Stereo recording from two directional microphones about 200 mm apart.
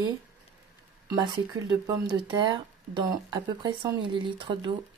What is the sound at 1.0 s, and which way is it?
Speech, 20° right (ahead or behind).